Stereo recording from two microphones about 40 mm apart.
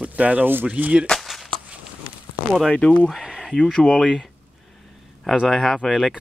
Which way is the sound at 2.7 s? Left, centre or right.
Left.